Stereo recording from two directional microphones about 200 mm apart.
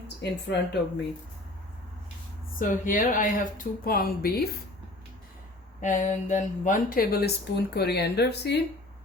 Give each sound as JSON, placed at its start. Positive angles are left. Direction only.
{"t": 0.2, "sound": "speech", "side_deg": 55}
{"t": 2.6, "sound": "speech", "side_deg": 40}
{"t": 5.8, "sound": "speech", "side_deg": 40}